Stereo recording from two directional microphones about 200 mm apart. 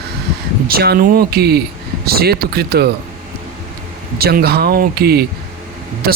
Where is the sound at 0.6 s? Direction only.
50° right (ahead or behind).